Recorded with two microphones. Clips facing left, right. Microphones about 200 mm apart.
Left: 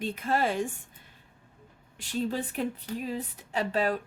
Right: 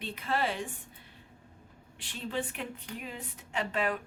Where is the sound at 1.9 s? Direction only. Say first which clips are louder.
Left 5 dB; 40° left (ahead or behind).